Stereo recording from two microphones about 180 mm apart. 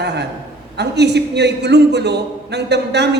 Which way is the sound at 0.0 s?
70° right (ahead or behind).